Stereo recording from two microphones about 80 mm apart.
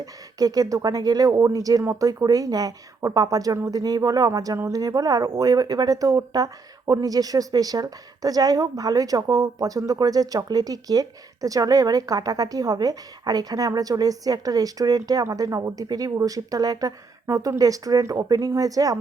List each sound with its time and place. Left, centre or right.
0.0 s speech: right
4.3 s speech: right
17.2 s speech: right